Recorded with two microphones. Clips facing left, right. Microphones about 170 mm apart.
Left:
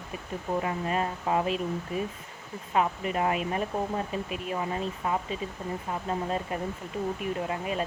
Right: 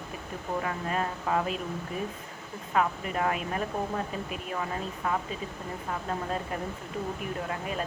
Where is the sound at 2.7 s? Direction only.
20° left (ahead or behind).